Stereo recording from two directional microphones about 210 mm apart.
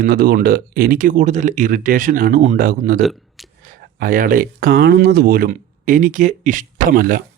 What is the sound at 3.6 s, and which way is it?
Speech, 40° right (ahead or behind).